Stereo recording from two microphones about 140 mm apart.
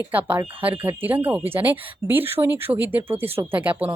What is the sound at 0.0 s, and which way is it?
Speech, 10° right (ahead or behind).